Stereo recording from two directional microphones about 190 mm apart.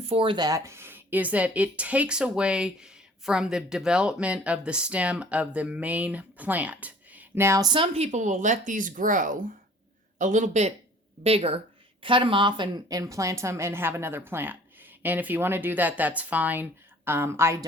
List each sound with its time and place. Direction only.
0.0 s speech: 30° right (ahead or behind); by 17.7 s 15° right (ahead or behind)